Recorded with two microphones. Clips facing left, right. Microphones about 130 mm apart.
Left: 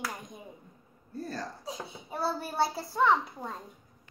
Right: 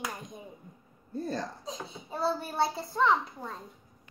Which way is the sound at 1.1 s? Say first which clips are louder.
Right 4 dB; 20° right (ahead or behind).